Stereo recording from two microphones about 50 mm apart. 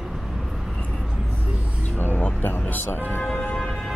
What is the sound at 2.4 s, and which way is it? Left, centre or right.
Music, left.